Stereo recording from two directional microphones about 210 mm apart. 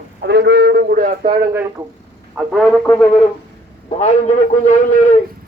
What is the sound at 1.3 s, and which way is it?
Speech, 15° right (ahead or behind).